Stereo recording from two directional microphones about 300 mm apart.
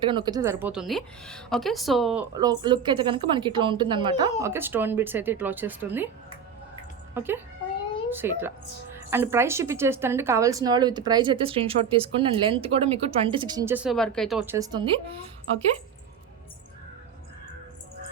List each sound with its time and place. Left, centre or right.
0.0 s a woman's voice: centre
2.3 s a woman's voice: centre
7.1 s a woman's voice: centre